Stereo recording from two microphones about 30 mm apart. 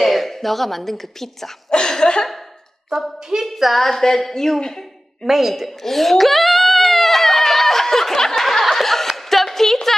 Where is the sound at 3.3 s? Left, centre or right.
Centre.